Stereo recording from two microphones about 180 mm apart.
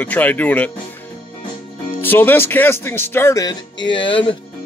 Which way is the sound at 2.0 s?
10° left (ahead or behind).